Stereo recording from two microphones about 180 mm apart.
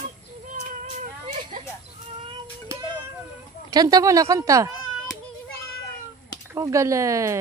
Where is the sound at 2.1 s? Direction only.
25° right (ahead or behind).